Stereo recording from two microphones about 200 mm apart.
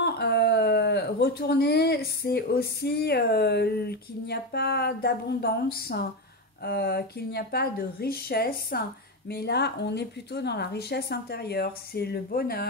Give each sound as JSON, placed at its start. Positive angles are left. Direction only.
{"t": 0.0, "sound": "speech", "side_deg": 55}